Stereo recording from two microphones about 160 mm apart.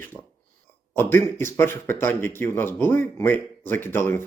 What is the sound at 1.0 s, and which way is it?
Speech, 15° left (ahead or behind).